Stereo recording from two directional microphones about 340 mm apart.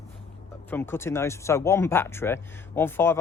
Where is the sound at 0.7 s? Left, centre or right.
Centre.